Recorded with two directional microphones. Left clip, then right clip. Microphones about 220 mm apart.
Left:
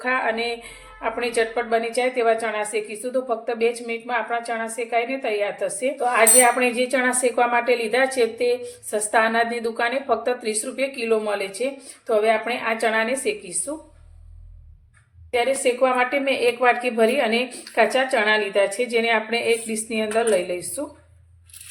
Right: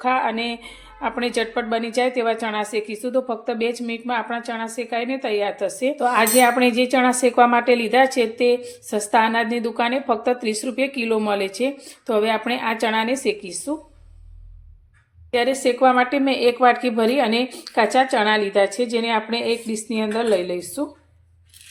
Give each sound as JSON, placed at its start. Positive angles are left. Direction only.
{"t": 0.0, "sound": "a woman's voice", "side_deg": -25}
{"t": 15.3, "sound": "a woman's voice", "side_deg": -35}